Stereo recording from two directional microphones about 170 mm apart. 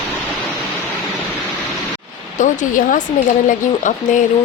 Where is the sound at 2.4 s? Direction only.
50° left (ahead or behind).